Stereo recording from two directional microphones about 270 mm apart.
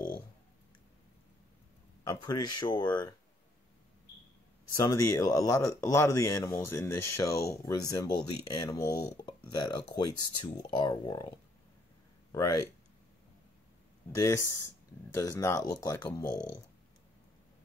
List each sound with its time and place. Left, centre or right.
2.0 s speech: centre
5.0 s speech: centre
10.1 s speech: left
10.4 s speech: centre
12.3 s speech: centre
14.1 s speech: centre